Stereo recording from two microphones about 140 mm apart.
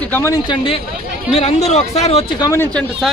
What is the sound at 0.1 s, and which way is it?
Speech, 20° left (ahead or behind).